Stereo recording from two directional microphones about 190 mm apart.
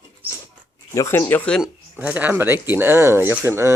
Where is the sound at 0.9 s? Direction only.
15° left (ahead or behind).